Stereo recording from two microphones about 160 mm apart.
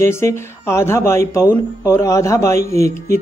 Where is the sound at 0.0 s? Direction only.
15° left (ahead or behind).